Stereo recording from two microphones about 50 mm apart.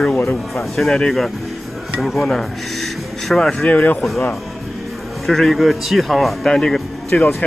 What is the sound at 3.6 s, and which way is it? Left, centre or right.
Speech, left.